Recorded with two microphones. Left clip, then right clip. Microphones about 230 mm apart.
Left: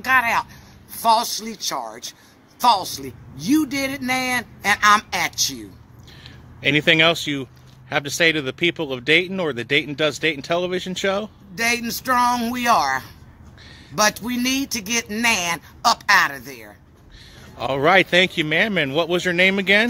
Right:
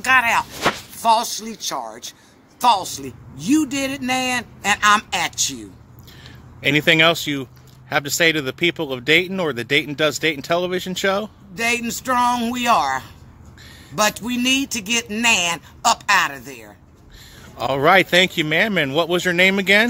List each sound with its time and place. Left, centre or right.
0.0 s speech: centre